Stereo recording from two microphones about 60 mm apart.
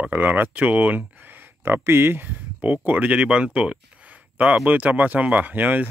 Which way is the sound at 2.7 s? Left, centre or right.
Right.